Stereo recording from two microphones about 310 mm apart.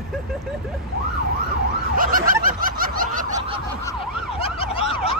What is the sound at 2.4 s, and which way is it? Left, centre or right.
Snicker, right.